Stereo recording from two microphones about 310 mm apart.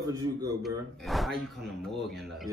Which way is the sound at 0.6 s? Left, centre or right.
Centre.